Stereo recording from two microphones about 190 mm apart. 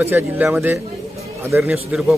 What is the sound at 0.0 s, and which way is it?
A man's voice, 10° right (ahead or behind).